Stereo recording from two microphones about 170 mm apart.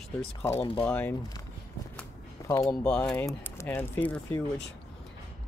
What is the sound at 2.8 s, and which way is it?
Speech, 10° left (ahead or behind).